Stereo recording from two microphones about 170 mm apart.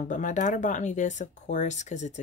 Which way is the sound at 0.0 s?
45° left (ahead or behind).